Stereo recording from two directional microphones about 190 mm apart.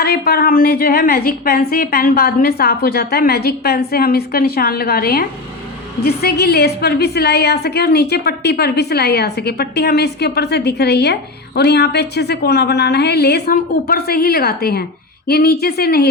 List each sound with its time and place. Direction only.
0.0 s a woman's voice: 55° left (ahead or behind)